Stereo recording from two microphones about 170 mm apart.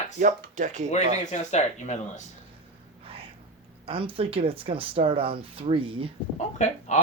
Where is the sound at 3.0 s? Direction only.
35° right (ahead or behind).